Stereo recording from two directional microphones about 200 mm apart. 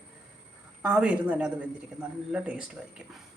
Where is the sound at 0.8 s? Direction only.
5° right (ahead or behind).